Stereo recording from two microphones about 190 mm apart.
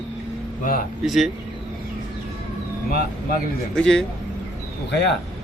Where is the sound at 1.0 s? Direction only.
Centre (ahead or behind).